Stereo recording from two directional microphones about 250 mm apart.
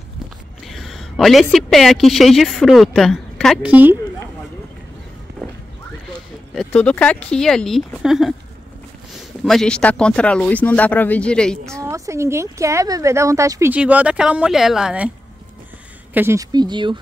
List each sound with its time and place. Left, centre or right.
0.7 s a woman's voice: centre
6.5 s speech: centre
9.4 s speech: centre
11.7 s speech: centre
16.1 s speech: centre